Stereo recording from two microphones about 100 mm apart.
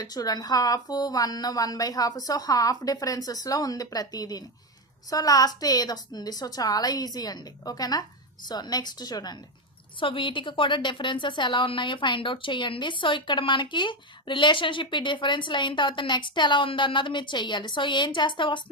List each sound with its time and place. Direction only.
0.0 s a woman's voice: 40° left (ahead or behind)
10.0 s a woman's voice: 55° left (ahead or behind)